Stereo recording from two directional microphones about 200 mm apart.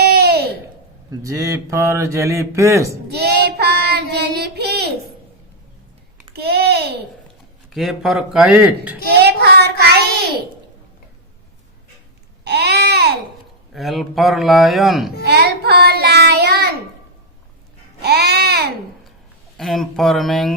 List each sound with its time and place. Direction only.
0.0 s a sound: 50° right (ahead or behind)
1.2 s speech: 15° right (ahead or behind)
3.2 s child singing: 55° right (ahead or behind)
6.3 s a sound: 50° right (ahead or behind)
7.7 s speech: centre (ahead or behind)
9.1 s child singing: 55° right (ahead or behind)
12.5 s a sound: 55° right (ahead or behind)
13.7 s speech: centre (ahead or behind)
15.2 s child singing: 55° right (ahead or behind)
18.0 s baby cry: 55° right (ahead or behind)
19.5 s speech: centre (ahead or behind)